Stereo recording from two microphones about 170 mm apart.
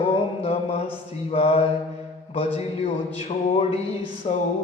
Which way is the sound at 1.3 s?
35° left (ahead or behind).